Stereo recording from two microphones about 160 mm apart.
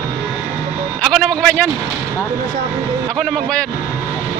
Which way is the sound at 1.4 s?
10° left (ahead or behind).